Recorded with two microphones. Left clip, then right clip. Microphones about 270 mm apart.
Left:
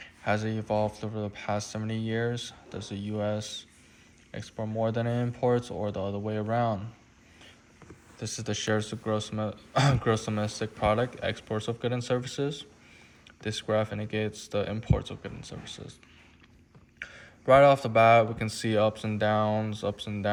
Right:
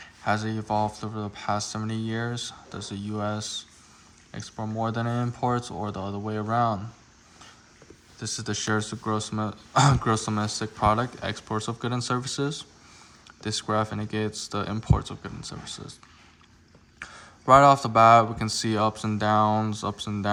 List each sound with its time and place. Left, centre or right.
0.0 s speech: centre
8.2 s speech: centre
17.0 s speech: centre
19.5 s speech: right
19.7 s speech: centre